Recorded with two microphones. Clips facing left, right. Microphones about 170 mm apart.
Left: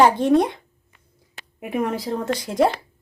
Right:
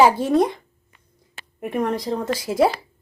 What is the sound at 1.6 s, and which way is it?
A woman's voice, 5° left (ahead or behind).